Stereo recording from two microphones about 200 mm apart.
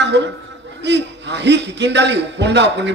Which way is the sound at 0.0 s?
60° right (ahead or behind).